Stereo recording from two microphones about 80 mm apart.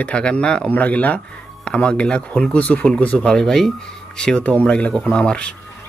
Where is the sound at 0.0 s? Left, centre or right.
Centre.